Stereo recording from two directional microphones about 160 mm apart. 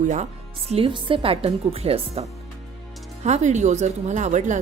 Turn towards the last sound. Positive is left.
turn(degrees=-50)  # may be behind; listen again after turning